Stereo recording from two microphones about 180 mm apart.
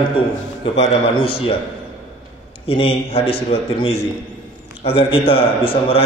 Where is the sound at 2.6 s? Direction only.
30° left (ahead or behind).